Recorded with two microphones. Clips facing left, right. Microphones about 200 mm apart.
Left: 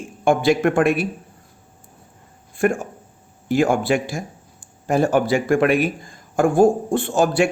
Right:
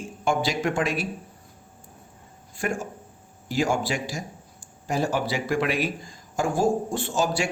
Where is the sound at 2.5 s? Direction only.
55° left (ahead or behind).